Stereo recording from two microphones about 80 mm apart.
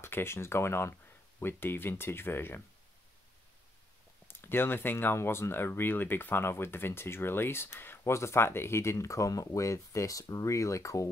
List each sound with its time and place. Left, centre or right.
0.0 s speech: left
4.3 s speech: left